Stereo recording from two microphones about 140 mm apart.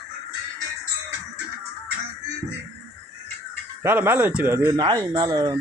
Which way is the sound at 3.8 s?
15° right (ahead or behind).